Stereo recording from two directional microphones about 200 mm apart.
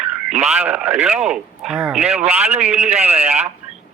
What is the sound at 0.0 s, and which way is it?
Speech, 5° right (ahead or behind).